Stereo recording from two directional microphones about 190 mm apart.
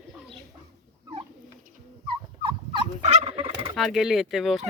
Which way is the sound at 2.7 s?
30° right (ahead or behind).